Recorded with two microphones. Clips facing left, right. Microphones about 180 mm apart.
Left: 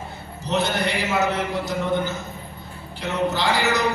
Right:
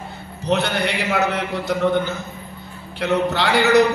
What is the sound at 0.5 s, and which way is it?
Speech, 65° right (ahead or behind).